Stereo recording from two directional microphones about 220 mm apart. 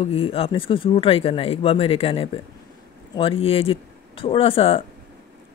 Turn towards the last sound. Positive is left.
turn(degrees=25)  # may be behind; listen again after turning